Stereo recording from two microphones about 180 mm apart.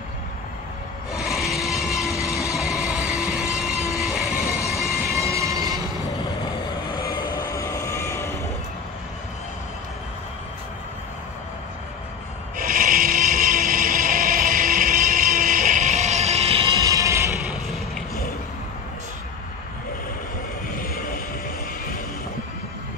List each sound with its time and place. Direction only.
1.1 s train: centre (ahead or behind)
5.1 s train: 15° right (ahead or behind)
6.9 s vehicle: 25° left (ahead or behind)
12.5 s a sound: 50° right (ahead or behind); by 16.6 s 35° right (ahead or behind)
16.7 s music: 20° right (ahead or behind)
17.5 s a sound: centre (ahead or behind)